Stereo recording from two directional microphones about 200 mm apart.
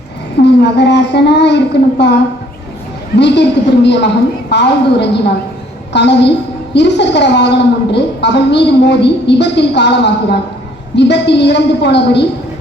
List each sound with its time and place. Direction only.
0.4 s a woman's voice: 55° left (ahead or behind)
3.2 s a woman's voice: 60° left (ahead or behind)